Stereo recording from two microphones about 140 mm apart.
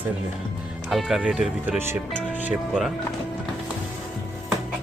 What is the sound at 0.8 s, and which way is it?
Speech, centre (ahead or behind).